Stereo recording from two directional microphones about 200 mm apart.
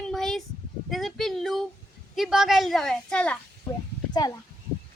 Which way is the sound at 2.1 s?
Centre (ahead or behind).